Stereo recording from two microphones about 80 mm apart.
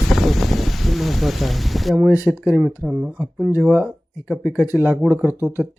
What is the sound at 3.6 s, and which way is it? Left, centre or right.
Speech, centre.